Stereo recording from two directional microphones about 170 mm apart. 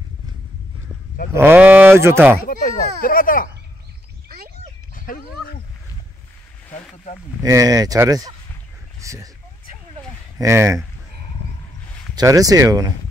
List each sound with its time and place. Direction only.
1.3 s speech: 10° right (ahead or behind)
2.4 s a child's voice: 55° left (ahead or behind)
4.9 s dog: 55° left (ahead or behind)
7.4 s speech: 20° right (ahead or behind)
10.4 s speech: 15° right (ahead or behind)
12.2 s speech: 20° right (ahead or behind)